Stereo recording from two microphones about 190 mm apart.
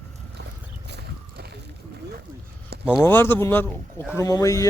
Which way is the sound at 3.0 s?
10° left (ahead or behind).